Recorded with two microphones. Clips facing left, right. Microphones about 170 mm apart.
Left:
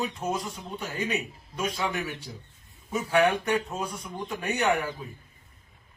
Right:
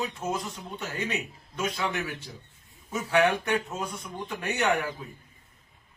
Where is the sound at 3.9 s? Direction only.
Centre (ahead or behind).